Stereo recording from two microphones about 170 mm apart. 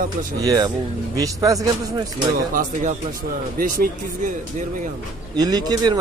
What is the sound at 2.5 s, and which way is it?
Speech, 50° right (ahead or behind).